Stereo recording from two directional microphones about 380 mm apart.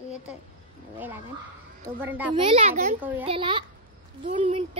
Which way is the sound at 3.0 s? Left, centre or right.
Centre.